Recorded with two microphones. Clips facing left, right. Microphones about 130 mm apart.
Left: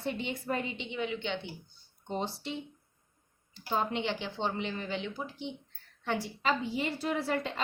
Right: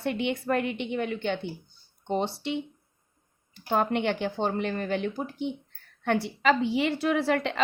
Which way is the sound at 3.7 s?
60° right (ahead or behind).